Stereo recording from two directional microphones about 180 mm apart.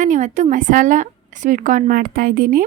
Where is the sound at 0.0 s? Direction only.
40° right (ahead or behind).